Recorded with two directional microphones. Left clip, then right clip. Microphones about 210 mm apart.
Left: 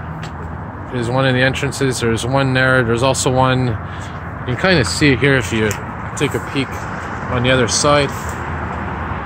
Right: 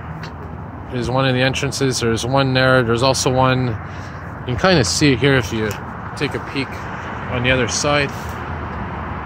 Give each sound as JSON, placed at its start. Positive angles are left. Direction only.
{"t": 0.9, "sound": "speech", "side_deg": -10}
{"t": 5.2, "sound": "speech", "side_deg": 0}
{"t": 7.3, "sound": "speech", "side_deg": 20}